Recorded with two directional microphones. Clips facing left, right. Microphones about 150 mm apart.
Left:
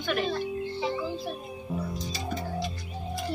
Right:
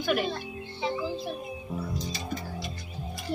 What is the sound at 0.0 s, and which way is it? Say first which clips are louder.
Speech: right 1 dB; 5° right (ahead or behind).